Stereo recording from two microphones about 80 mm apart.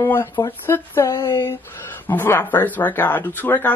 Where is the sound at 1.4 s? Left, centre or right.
Left.